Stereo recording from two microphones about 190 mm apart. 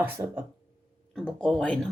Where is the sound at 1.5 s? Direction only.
5° left (ahead or behind).